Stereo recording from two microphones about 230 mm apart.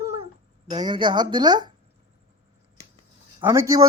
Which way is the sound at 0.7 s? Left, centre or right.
Centre.